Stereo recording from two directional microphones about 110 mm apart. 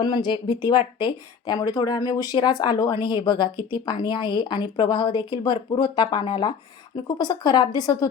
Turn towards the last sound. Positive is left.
turn(degrees=40)  # may be behind; listen again after turning